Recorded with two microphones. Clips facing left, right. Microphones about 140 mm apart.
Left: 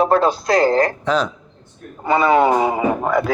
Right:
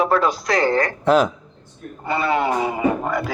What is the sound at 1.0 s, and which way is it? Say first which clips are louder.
Speech: right 3 dB; 10° right (ahead or behind).